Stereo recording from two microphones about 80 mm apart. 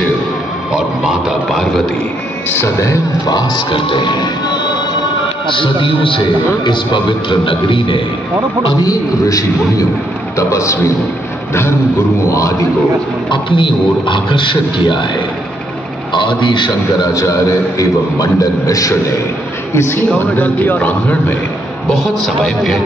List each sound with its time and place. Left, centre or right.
0.7 s speech: centre
2.5 s a man's voice: left
3.3 s speech: left
5.6 s a man's voice: left
8.8 s a man's voice: left
12.3 s a man's voice: left
13.3 s a man's voice: left
16.1 s a man's voice: left
17.0 s a man's voice: left
20.3 s a man's voice: left
21.9 s a man's voice: centre